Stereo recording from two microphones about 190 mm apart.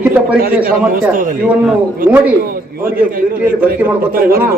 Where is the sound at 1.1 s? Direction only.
45° right (ahead or behind).